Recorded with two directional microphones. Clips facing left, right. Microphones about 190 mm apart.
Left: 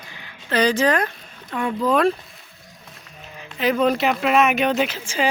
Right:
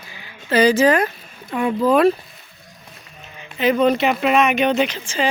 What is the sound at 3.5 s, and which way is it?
Speech, centre (ahead or behind).